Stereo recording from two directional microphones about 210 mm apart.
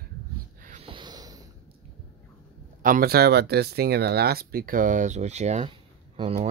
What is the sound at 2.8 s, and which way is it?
Speech, 45° right (ahead or behind).